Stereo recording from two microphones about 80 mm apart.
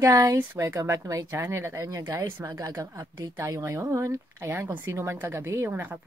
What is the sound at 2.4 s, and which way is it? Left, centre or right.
A woman's voice, right.